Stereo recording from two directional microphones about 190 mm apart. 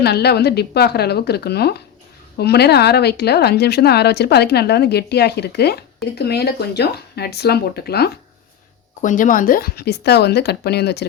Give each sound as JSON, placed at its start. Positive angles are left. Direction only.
{"t": 0.0, "sound": "speech", "side_deg": 60}
{"t": 9.0, "sound": "speech", "side_deg": 45}